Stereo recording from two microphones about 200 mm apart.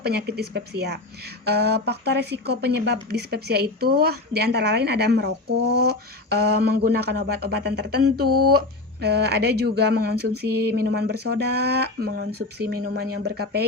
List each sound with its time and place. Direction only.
0.0 s a woman's voice: 55° right (ahead or behind)